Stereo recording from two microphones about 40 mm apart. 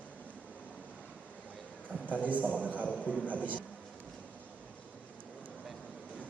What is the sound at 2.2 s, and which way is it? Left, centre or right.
Speech, right.